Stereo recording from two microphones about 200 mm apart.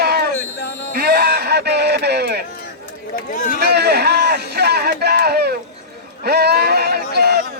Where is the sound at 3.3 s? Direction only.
40° left (ahead or behind).